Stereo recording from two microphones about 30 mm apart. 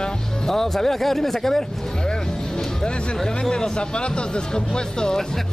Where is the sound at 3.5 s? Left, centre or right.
Left.